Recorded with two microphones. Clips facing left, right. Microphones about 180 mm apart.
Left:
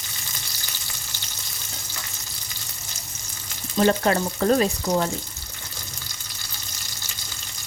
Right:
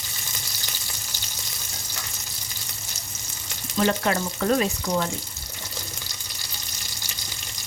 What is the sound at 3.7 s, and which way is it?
Speech, 35° left (ahead or behind).